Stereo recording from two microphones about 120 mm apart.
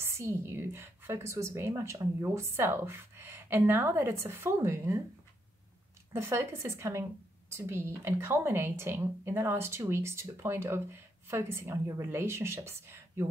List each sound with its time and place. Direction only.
0.0 s a woman's voice: 25° right (ahead or behind)
6.1 s a woman's voice: 20° right (ahead or behind)